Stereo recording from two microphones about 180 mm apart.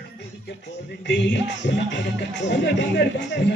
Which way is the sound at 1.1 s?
80° left.